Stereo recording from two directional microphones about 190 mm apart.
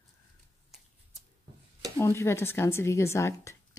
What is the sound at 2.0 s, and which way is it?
Speech, 15° left (ahead or behind).